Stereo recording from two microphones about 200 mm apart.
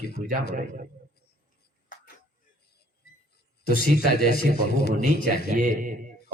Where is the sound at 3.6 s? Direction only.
50° left (ahead or behind).